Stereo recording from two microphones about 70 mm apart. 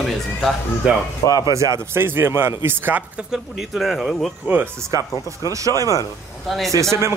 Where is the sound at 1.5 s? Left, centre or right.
Right.